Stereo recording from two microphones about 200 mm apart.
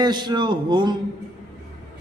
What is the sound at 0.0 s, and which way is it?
Speech, 20° right (ahead or behind).